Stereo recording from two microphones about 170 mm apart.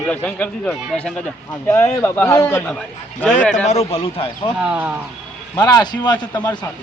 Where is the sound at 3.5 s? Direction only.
40° left (ahead or behind).